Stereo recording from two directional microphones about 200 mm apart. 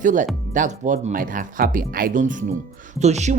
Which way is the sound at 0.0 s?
40° right (ahead or behind).